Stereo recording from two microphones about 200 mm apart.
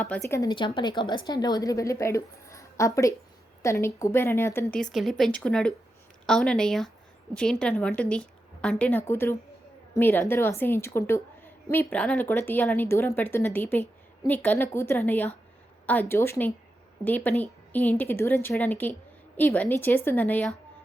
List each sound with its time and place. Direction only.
0.0 s a woman's voice: 10° left (ahead or behind)
4.8 s a woman's voice: centre (ahead or behind)